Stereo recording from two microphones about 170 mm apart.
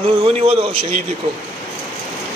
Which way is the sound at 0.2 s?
35° right (ahead or behind).